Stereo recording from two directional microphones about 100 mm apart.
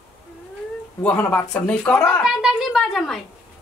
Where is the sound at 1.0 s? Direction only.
15° left (ahead or behind).